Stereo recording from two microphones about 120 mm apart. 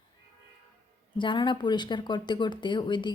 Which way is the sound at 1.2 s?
40° left (ahead or behind).